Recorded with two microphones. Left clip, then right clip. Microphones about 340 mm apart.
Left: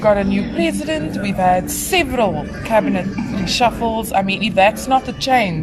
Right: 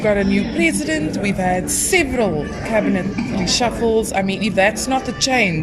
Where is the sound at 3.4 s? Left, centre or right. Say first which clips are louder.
Left 2 dB; left.